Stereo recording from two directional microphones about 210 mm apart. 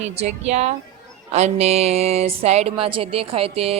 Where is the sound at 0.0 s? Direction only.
30° right (ahead or behind).